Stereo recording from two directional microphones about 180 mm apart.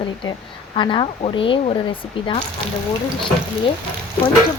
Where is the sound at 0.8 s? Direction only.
25° left (ahead or behind).